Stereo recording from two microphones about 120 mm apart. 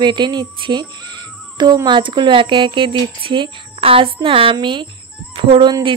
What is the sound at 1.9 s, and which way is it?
Speech, 40° right (ahead or behind).